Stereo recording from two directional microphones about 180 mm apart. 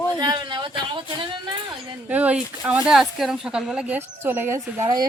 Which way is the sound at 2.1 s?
10° right (ahead or behind).